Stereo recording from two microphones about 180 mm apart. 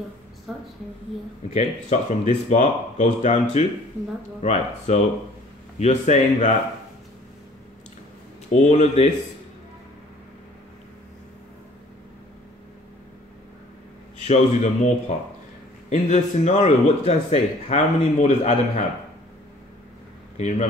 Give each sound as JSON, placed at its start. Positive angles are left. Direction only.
{"t": 0.5, "sound": "speech", "side_deg": 0}
{"t": 1.5, "sound": "a man's voice", "side_deg": 40}
{"t": 8.5, "sound": "a man's voice", "side_deg": 40}
{"t": 14.2, "sound": "a man's voice", "side_deg": 40}
{"t": 20.3, "sound": "speech", "side_deg": 40}